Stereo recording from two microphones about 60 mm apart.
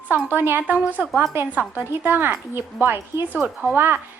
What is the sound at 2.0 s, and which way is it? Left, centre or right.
A woman's voice, right.